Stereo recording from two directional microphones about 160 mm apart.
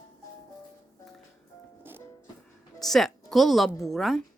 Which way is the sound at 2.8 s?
Centre (ahead or behind).